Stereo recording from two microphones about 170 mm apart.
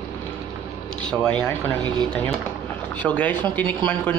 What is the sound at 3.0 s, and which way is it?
Speech, 10° left (ahead or behind).